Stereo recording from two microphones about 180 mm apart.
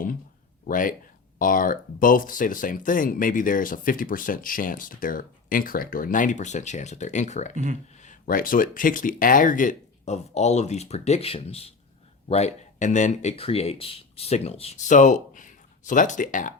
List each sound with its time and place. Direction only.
0.6 s speech: 50° left (ahead or behind)
7.5 s speech: 45° right (ahead or behind)
7.9 s speech: 45° left (ahead or behind)